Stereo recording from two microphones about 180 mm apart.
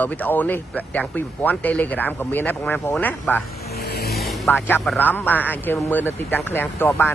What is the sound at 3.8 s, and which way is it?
Vehicle, 60° left (ahead or behind).